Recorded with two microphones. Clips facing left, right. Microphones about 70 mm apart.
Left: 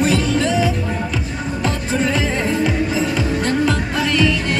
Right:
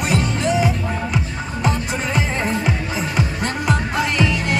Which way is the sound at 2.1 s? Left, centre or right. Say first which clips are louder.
Left 2 dB; centre.